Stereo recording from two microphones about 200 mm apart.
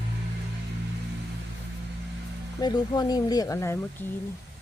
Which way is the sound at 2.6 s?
20° left (ahead or behind).